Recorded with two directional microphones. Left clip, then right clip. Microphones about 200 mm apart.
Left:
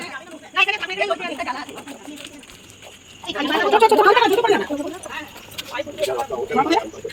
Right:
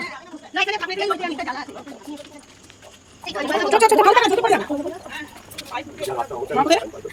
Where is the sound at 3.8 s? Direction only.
15° right (ahead or behind).